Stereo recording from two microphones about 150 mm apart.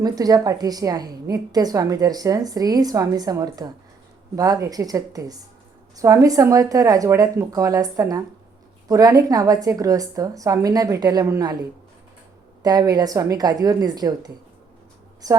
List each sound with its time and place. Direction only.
0.0 s a woman's voice: 25° right (ahead or behind)
12.6 s a woman's voice: 25° right (ahead or behind)